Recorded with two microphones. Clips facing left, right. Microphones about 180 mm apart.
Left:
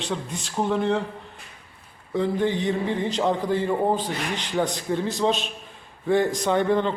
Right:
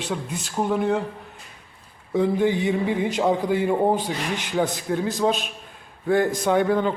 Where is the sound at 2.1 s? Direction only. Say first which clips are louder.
Right 3 dB; 10° right (ahead or behind).